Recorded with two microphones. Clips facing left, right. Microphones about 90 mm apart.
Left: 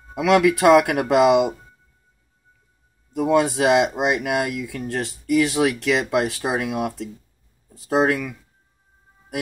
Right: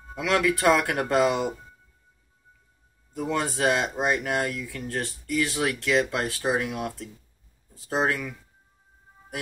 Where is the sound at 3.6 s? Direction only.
15° left (ahead or behind).